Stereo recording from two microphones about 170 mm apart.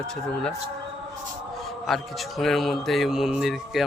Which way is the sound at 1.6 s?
Centre (ahead or behind).